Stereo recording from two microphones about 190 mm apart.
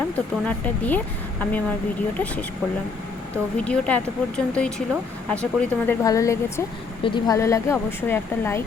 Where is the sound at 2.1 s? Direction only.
5° left (ahead or behind).